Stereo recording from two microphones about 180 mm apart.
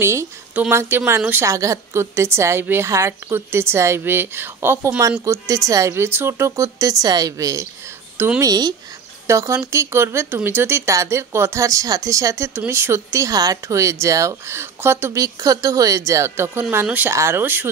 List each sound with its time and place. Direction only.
0.0 s a woman's voice: 15° right (ahead or behind)
8.5 s a woman's voice: 20° right (ahead or behind)